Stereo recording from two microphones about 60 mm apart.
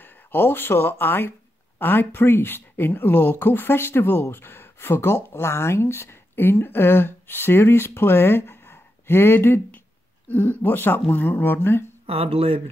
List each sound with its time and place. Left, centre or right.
0.0 s speech: left
10.2 s speech: left